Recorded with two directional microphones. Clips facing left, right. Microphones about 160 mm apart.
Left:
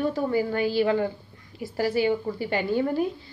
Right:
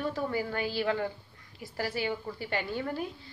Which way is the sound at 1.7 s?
15° left (ahead or behind).